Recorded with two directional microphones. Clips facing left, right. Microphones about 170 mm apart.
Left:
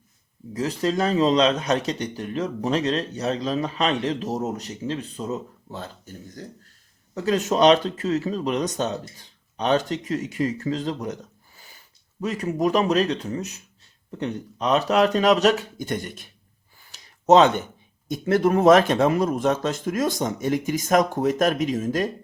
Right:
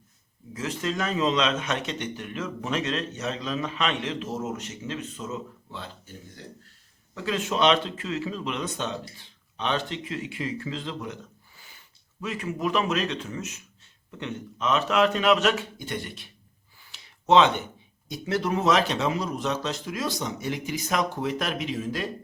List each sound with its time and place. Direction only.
0.5 s a man's voice: 35° left (ahead or behind)
16.9 s a sound: 45° left (ahead or behind)
18.1 s speech: 50° left (ahead or behind)